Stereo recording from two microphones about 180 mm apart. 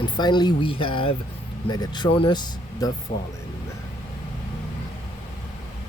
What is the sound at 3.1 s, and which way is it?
Speech, 50° left (ahead or behind).